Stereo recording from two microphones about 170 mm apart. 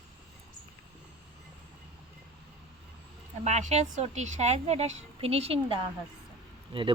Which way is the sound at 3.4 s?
40° right (ahead or behind).